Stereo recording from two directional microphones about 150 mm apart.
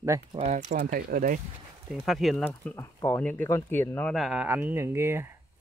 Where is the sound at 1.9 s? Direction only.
Centre (ahead or behind).